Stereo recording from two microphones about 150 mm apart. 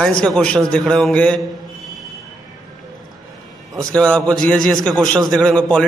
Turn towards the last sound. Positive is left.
turn(degrees=5)  # may be behind; listen again after turning